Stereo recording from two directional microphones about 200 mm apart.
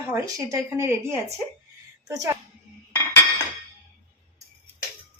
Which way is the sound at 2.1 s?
15° right (ahead or behind).